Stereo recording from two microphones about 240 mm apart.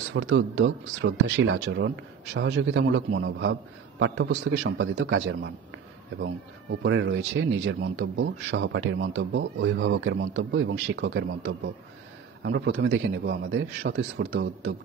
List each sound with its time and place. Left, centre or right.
0.1 s speech: right
6.8 s speech: right